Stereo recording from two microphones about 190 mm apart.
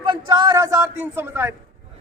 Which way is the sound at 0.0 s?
25° right (ahead or behind).